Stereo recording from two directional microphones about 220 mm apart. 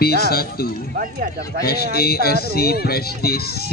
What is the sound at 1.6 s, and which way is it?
Speech, 45° left (ahead or behind).